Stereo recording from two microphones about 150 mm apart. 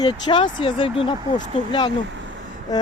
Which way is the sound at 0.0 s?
30° left (ahead or behind).